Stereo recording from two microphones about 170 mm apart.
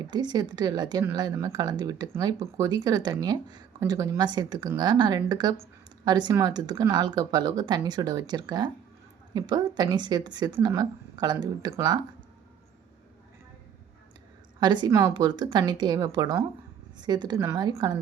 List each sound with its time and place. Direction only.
0.1 s speech: 25° right (ahead or behind)
14.6 s speech: 25° right (ahead or behind)